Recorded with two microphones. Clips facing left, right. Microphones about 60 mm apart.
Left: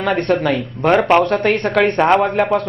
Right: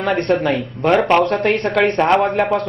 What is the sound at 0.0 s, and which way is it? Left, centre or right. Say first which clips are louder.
A man's voice: even; centre.